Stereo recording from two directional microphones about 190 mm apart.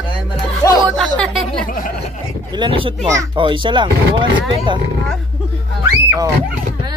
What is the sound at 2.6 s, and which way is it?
A child's voice, 25° right (ahead or behind).